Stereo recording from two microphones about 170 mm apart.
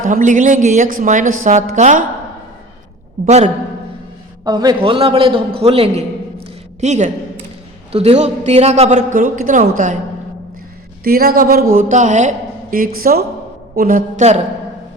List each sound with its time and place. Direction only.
0.1 s a man's voice: 50° right (ahead or behind)
3.2 s a man's voice: 40° right (ahead or behind)
4.4 s a man's voice: 25° right (ahead or behind); by 10.0 s 50° right (ahead or behind)
11.0 s a woman's voice: 65° right (ahead or behind); by 12.3 s 45° right (ahead or behind)
12.7 s a woman's voice: 60° right (ahead or behind); by 14.4 s 40° right (ahead or behind)